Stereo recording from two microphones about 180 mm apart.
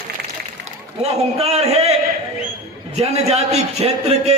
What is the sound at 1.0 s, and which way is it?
Speech, 35° right (ahead or behind).